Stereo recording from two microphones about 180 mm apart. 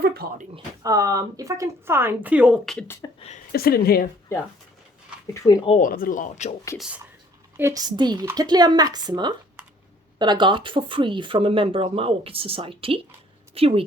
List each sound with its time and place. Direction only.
0.0 s speech: 60° right (ahead or behind)
0.5 s speech: 20° right (ahead or behind); by 2.8 s centre (ahead or behind)
2.8 s speech: 15° left (ahead or behind)
3.2 s a sound: 35° left (ahead or behind)
3.5 s speech: 55° left (ahead or behind)
5.3 s speech: 20° left (ahead or behind)
5.8 s speech: 50° left (ahead or behind)
6.7 s speech: 5° right (ahead or behind)
7.5 s speech: 15° right (ahead or behind); by 13.8 s 30° right (ahead or behind)